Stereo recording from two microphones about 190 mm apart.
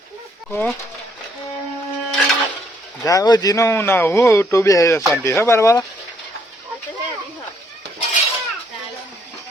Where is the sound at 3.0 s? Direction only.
20° left (ahead or behind).